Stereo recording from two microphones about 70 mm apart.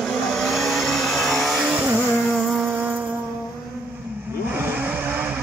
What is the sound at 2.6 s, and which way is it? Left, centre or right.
Music, right.